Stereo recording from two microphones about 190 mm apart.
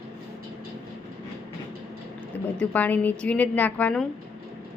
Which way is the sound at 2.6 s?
10° left (ahead or behind).